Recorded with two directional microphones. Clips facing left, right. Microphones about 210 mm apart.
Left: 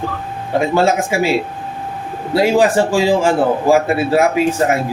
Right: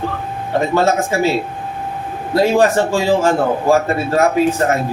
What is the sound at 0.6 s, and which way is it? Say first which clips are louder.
A man's voice: left 1 dB; 10° left (ahead or behind).